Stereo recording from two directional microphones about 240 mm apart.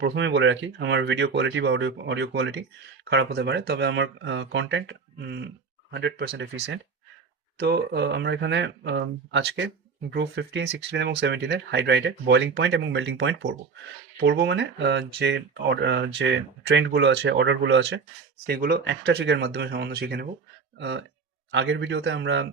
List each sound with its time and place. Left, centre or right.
0.0 s speech: right
7.6 s speech: right
18.4 s speech: right